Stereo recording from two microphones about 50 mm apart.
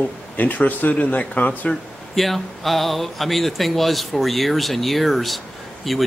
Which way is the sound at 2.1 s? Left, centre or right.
Centre.